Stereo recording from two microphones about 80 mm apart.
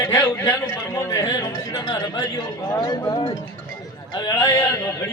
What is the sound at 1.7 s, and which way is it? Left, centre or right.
Speech, left.